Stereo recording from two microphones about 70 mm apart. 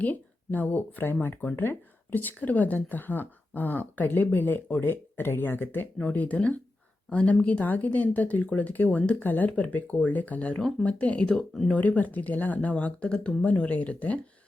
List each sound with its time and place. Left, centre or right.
0.0 s speech: left
1.6 s speech: left
6.0 s speech: centre
11.3 s speech: centre
11.7 s speech: left